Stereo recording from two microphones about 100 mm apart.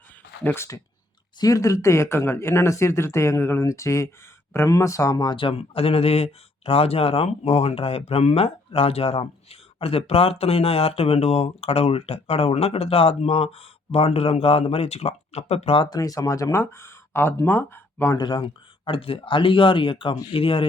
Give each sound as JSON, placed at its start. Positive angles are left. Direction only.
{"t": 0.4, "sound": "speech", "side_deg": 25}
{"t": 1.4, "sound": "speech", "side_deg": 35}
{"t": 15.8, "sound": "speech", "side_deg": 40}
{"t": 18.2, "sound": "speech", "side_deg": 50}
{"t": 18.9, "sound": "speech", "side_deg": 65}